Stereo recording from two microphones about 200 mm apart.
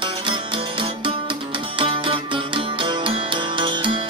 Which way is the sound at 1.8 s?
25° right (ahead or behind).